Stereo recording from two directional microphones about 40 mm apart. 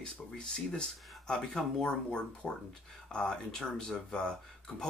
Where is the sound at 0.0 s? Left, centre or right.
Centre.